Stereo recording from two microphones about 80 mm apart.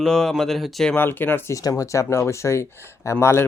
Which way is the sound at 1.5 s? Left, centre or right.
Left.